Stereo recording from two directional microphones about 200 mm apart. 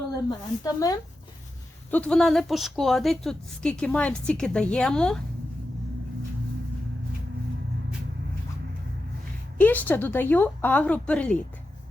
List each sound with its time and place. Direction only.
0.6 s a woman's voice: 20° left (ahead or behind)
1.9 s a woman's voice: 5° left (ahead or behind)
9.6 s a woman's voice: 10° left (ahead or behind)